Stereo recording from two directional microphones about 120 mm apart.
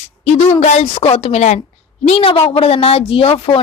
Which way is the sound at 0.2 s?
60° left (ahead or behind).